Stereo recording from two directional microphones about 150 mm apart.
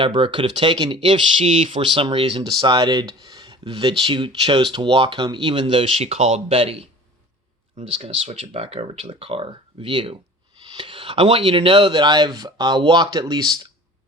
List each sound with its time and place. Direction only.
0.0 s speech: 35° right (ahead or behind)
1.4 s speech: 45° right (ahead or behind); by 13.6 s 25° right (ahead or behind)